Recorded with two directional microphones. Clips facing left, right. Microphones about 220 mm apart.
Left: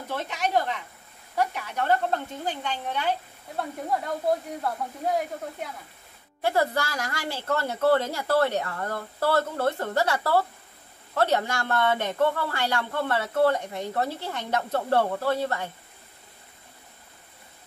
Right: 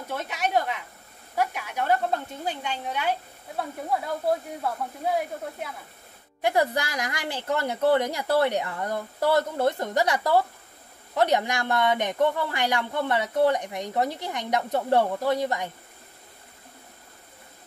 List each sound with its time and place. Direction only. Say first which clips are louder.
0.1 s speech: even; 10° right (ahead or behind)
6.4 s speech: right 1 dB; 15° right (ahead or behind)